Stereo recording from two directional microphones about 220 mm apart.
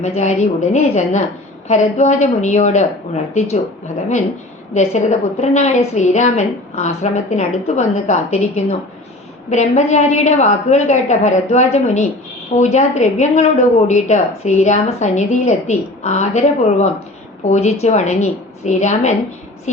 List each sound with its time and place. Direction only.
0.0 s a woman's voice: 30° left (ahead or behind)
4.7 s a woman's voice: 30° left (ahead or behind)